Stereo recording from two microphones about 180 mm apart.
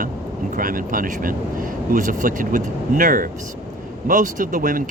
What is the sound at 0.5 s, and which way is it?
Speech, 50° right (ahead or behind).